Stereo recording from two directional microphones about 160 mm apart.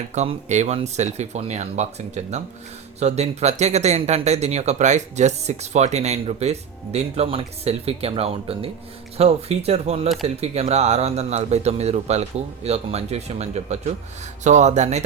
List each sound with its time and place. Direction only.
0.1 s speech: 45° right (ahead or behind)